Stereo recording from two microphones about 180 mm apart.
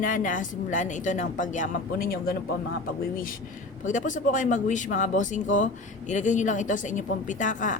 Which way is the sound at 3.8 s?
45° left (ahead or behind).